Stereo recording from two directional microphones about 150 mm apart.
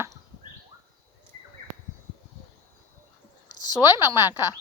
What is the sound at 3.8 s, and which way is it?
Speech, 25° left (ahead or behind).